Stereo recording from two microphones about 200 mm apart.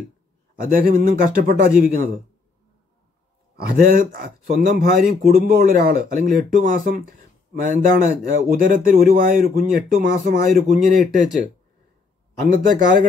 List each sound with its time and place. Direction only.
0.6 s speech: 45° right (ahead or behind)
3.5 s speech: 45° right (ahead or behind)
12.4 s speech: 40° right (ahead or behind)